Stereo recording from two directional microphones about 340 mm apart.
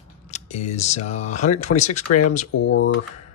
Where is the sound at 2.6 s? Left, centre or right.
Left.